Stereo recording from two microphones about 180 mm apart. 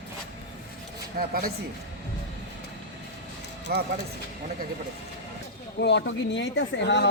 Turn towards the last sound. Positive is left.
turn(degrees=75)  # may be behind; listen again after turning